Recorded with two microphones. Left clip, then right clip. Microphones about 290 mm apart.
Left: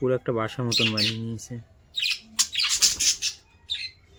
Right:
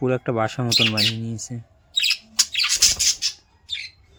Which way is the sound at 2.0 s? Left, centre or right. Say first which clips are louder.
Right 5 dB; centre.